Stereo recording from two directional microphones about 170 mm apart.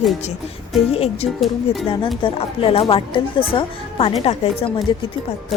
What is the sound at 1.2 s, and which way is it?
Speech, 35° left (ahead or behind).